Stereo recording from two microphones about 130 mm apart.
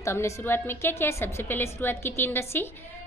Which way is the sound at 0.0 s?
20° left (ahead or behind).